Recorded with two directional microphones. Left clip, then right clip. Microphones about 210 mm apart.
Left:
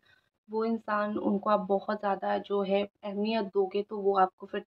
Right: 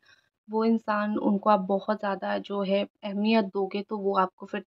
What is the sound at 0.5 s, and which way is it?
Speech, 40° right (ahead or behind).